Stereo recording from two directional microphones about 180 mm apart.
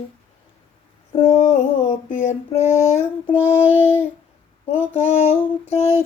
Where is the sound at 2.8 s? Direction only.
35° left (ahead or behind).